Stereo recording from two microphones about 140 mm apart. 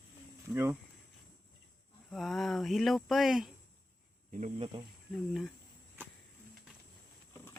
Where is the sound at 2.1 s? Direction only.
Centre (ahead or behind).